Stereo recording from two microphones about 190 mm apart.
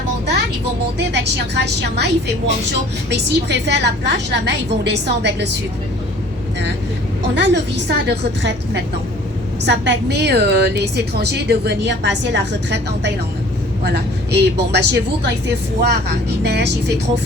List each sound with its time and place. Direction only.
0.9 s a woman's voice: 60° right (ahead or behind)
7.3 s a woman's voice: 65° right (ahead or behind)